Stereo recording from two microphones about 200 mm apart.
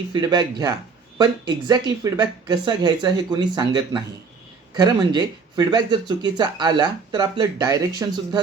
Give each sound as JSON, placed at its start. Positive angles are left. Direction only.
{"t": 0.1, "sound": "speech", "side_deg": -20}